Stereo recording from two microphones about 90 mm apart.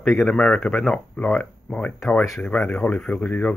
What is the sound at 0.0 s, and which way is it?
Speech, centre (ahead or behind).